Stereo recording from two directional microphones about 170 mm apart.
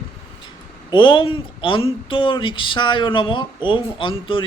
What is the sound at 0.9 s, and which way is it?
Speech, 30° left (ahead or behind).